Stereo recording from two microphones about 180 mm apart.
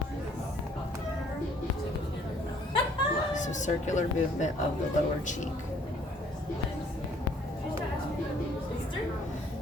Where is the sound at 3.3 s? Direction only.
45° left (ahead or behind).